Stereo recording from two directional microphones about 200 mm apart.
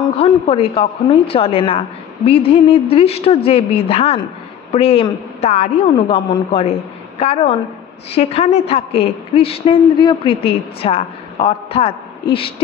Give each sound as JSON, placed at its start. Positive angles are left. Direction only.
{"t": 0.2, "sound": "a woman's voice", "side_deg": 30}